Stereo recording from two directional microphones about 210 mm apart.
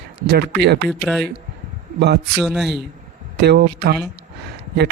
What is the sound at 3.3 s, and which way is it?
Speech, 50° right (ahead or behind).